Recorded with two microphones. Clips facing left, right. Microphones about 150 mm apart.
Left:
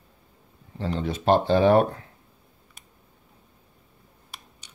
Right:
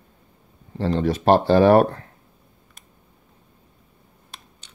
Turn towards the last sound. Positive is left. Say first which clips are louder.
# right 1 dB
turn(degrees=10)  # may be behind; listen again after turning